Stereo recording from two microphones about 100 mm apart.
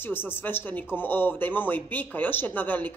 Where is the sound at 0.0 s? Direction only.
20° left (ahead or behind).